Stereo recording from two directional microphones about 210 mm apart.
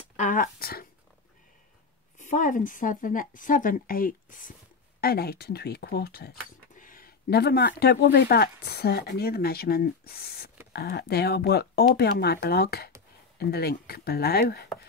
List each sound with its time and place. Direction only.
0.2 s speech: 40° left (ahead or behind)
2.1 s a woman's voice: 40° left (ahead or behind)